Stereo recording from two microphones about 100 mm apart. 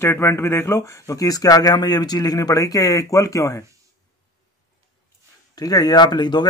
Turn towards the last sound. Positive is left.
turn(degrees=50)  # may be behind; listen again after turning